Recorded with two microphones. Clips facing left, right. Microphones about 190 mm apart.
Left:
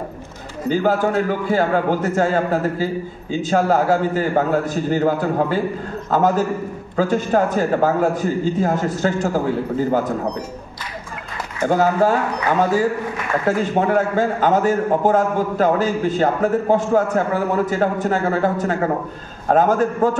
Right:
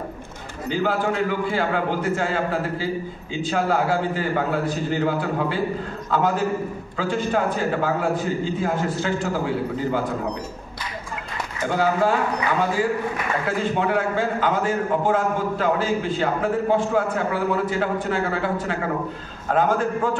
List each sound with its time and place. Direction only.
0.7 s a man's voice: 45° left (ahead or behind)
11.6 s a man's voice: 45° left (ahead or behind)
13.7 s a man's voice: 45° left (ahead or behind)